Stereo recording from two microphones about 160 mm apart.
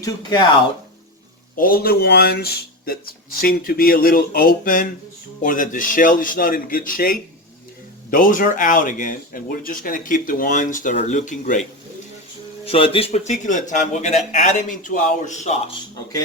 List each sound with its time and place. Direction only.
0.0 s speech: 25° left (ahead or behind)
1.5 s speech: 65° left (ahead or behind)
12.6 s speech: 35° left (ahead or behind)